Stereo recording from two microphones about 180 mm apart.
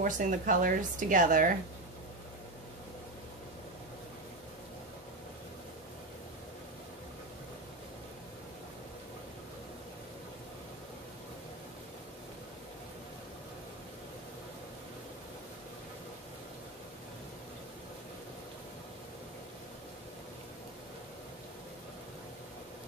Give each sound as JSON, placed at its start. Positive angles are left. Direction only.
{"t": 0.0, "sound": "speech", "side_deg": -45}